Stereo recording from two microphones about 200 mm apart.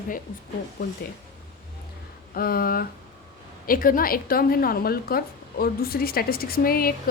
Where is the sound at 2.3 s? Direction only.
45° left (ahead or behind).